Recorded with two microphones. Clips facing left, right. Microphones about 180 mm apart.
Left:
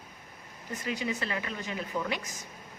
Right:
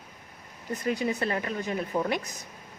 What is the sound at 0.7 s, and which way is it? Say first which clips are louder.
Speech: right 6 dB; 60° right (ahead or behind).